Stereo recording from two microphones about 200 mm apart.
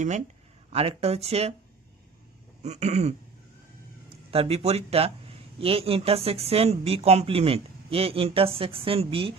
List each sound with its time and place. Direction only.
0.7 s speech: 30° right (ahead or behind)
2.6 s speech: 35° right (ahead or behind)
4.3 s speech: 30° right (ahead or behind)